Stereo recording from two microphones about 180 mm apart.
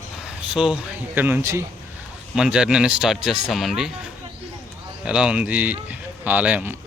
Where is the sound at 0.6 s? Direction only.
5° right (ahead or behind).